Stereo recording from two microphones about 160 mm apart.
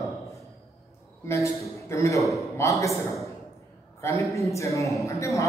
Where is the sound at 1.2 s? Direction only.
20° left (ahead or behind).